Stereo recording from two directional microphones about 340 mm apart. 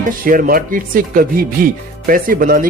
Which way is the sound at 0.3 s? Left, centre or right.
Right.